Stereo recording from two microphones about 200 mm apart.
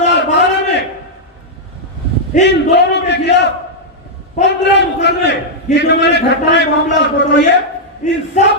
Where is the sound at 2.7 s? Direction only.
60° left (ahead or behind).